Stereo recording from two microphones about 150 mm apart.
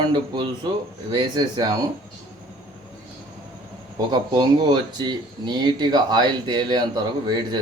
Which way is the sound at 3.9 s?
30° right (ahead or behind).